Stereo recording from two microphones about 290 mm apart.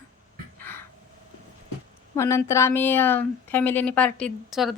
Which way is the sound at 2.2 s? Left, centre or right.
Centre.